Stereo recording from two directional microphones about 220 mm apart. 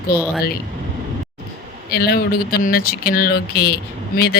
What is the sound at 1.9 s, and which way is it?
Speech, 45° left (ahead or behind).